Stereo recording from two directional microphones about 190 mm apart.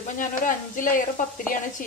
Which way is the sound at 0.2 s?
45° left (ahead or behind).